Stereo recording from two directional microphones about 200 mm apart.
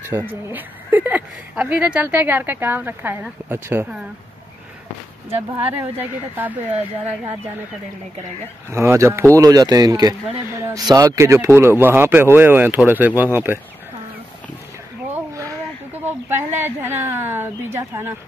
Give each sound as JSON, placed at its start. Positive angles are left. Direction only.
{"t": 0.3, "sound": "speech", "side_deg": -10}
{"t": 5.3, "sound": "speech", "side_deg": -10}
{"t": 8.7, "sound": "speech", "side_deg": -15}
{"t": 16.3, "sound": "speech", "side_deg": -10}